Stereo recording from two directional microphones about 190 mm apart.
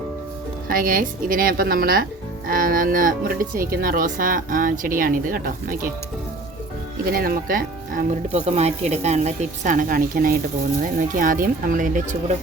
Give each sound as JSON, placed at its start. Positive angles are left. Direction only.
{"t": 0.7, "sound": "speech", "side_deg": -50}
{"t": 7.1, "sound": "speech", "side_deg": -50}